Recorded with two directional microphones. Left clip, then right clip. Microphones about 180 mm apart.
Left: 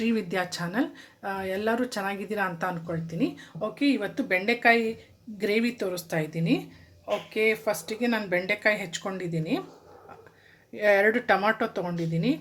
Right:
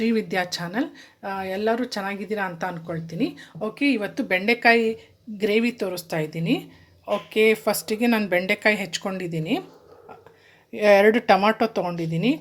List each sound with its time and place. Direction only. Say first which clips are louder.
0.0 s speech: right 4 dB; 20° right (ahead or behind)
7.0 s speech: right 5 dB; 40° right (ahead or behind)
10.7 s speech: right 6 dB; 35° right (ahead or behind)